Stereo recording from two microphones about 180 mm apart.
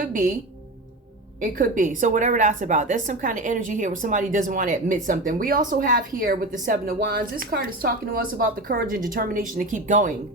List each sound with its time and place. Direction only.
0.0 s a woman's voice: 50° right (ahead or behind)
1.4 s a woman's voice: 50° right (ahead or behind)